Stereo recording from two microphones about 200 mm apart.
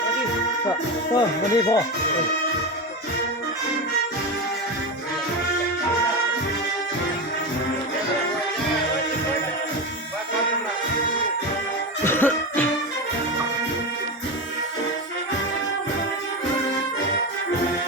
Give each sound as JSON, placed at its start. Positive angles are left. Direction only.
{"t": 1.1, "sound": "speech", "side_deg": 20}
{"t": 12.0, "sound": "music", "side_deg": 10}